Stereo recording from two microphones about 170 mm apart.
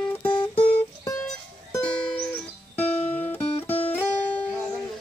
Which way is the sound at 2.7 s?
10° left (ahead or behind).